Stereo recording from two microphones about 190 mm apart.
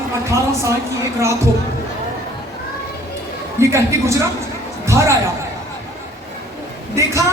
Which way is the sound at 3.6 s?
15° right (ahead or behind).